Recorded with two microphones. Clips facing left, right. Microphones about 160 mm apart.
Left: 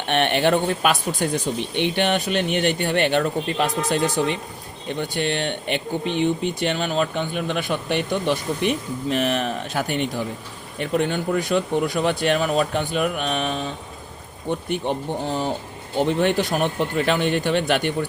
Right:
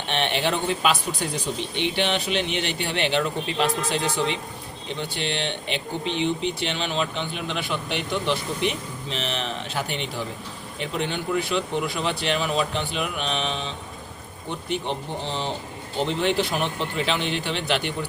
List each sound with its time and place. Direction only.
0.1 s speech: 55° left (ahead or behind)